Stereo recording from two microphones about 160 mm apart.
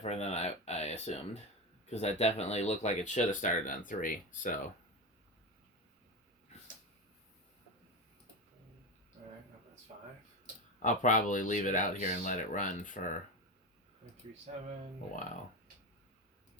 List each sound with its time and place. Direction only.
0.0 s speech: 40° left (ahead or behind); by 4.5 s 60° left (ahead or behind)
10.8 s speech: 55° left (ahead or behind)
14.5 s speech: 50° right (ahead or behind)